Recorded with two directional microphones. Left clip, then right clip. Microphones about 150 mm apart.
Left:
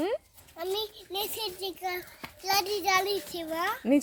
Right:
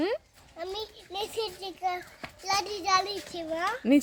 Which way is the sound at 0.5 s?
5° right (ahead or behind).